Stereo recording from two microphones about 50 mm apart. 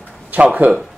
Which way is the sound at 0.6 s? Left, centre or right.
Right.